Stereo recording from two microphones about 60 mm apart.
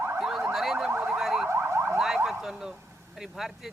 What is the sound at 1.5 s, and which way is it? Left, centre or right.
Car alarm, right.